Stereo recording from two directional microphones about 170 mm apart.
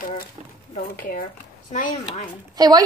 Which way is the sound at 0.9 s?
55° left (ahead or behind).